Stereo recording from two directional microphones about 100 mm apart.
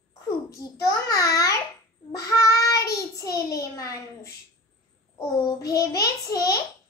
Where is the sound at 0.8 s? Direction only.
35° left (ahead or behind).